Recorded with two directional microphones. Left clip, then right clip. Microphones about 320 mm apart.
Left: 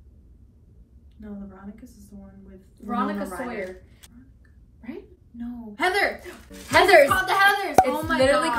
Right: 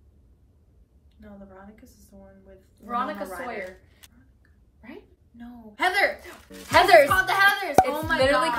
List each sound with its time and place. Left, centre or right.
1.2 s a woman's voice: centre
3.3 s speech: centre
5.4 s speech: centre
7.2 s a woman's voice: centre